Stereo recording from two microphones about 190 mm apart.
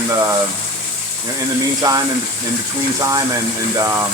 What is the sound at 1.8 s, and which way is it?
Speech, 20° right (ahead or behind).